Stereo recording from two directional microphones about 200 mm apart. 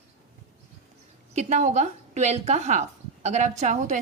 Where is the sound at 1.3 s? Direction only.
35° right (ahead or behind).